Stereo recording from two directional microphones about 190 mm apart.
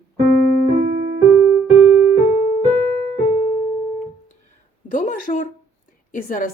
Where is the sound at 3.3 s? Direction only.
35° left (ahead or behind).